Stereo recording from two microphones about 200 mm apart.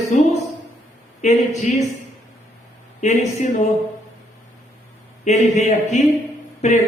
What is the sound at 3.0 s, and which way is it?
Speech, 35° left (ahead or behind).